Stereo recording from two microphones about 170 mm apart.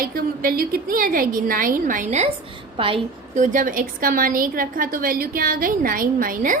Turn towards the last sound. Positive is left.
turn(degrees=-50)  # may be behind; listen again after turning